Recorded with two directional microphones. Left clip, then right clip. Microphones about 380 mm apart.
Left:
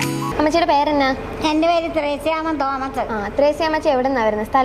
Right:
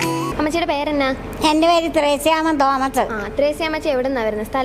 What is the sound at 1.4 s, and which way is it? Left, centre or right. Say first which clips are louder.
A woman's voice: right 3 dB; right.